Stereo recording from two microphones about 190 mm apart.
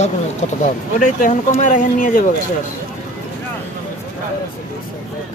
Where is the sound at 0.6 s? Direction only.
45° left (ahead or behind).